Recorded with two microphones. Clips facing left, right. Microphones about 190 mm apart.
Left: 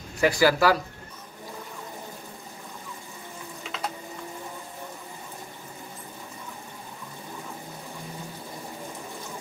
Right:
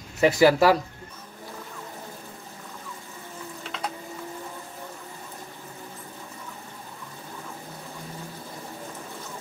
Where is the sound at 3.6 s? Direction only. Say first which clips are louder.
Even; centre (ahead or behind).